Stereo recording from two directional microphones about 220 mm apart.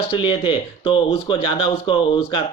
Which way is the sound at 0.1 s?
25° left (ahead or behind).